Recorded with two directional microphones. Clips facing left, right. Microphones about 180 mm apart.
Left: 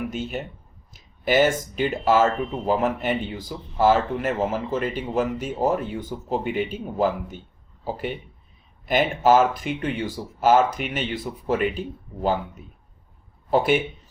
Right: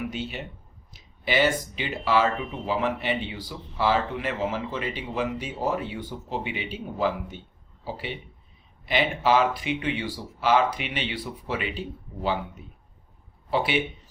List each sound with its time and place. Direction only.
0.1 s speech: 45° left (ahead or behind)